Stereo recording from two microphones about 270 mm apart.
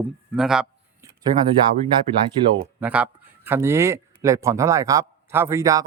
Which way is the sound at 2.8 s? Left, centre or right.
Centre.